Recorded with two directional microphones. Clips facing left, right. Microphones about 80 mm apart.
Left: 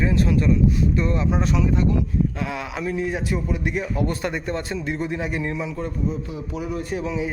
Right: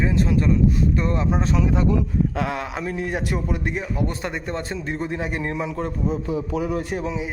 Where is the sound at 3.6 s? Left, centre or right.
Right.